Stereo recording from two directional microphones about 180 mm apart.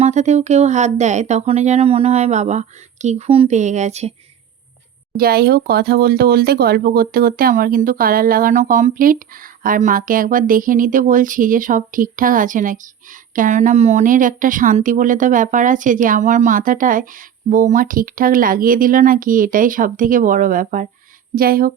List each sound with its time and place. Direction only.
0.0 s speech: 40° right (ahead or behind)
5.1 s speech: 55° right (ahead or behind)